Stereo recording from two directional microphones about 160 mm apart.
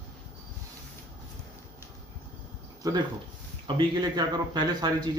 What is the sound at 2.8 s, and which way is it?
Speech, 20° right (ahead or behind).